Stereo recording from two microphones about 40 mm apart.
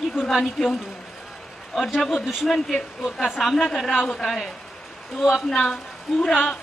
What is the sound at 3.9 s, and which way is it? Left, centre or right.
Speech, centre.